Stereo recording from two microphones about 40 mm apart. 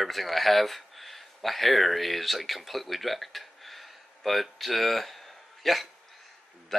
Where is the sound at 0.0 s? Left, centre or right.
Centre.